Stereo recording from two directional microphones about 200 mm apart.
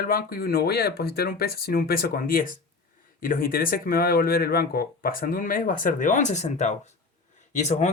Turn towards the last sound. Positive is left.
turn(degrees=35)  # may be behind; listen again after turning